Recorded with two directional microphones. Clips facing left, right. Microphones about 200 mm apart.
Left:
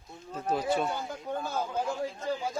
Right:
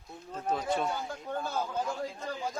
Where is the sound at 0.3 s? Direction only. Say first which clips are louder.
Left 2 dB; 10° left (ahead or behind).